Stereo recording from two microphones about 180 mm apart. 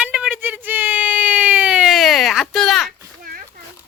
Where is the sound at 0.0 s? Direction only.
5° right (ahead or behind).